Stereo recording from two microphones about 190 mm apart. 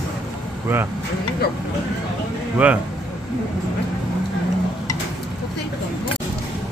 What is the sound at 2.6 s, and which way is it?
Speech, 5° right (ahead or behind).